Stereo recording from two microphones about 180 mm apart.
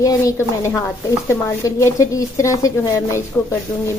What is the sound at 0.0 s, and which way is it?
Speech, 20° left (ahead or behind).